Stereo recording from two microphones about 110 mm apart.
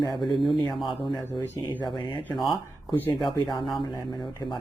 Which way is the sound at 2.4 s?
40° left (ahead or behind).